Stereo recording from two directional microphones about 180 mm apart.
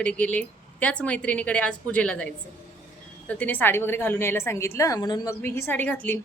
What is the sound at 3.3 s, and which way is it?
A woman's voice, 10° left (ahead or behind).